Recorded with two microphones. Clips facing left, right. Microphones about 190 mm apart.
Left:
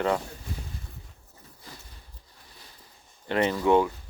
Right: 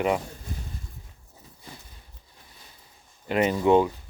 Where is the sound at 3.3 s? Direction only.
15° right (ahead or behind).